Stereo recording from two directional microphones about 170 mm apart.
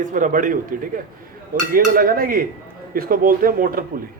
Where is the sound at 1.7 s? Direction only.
55° right (ahead or behind).